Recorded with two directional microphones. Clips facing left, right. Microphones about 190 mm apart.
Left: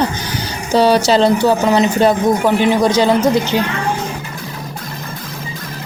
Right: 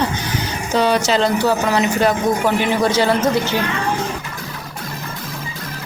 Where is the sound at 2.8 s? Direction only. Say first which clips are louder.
Left 3 dB; 15° left (ahead or behind).